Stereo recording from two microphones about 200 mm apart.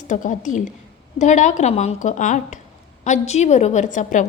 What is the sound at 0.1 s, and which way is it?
A woman's voice, 40° left (ahead or behind).